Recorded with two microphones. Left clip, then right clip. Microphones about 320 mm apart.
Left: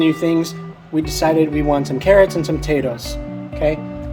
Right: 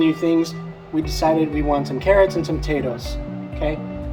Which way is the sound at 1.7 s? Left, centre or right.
Left.